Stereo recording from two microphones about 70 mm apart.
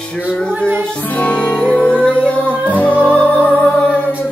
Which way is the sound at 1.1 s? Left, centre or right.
Centre.